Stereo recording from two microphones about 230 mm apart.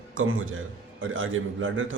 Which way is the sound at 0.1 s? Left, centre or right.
Right.